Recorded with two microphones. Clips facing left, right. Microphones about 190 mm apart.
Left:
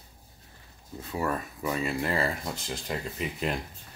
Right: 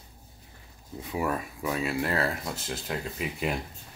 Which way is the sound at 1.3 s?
5° right (ahead or behind).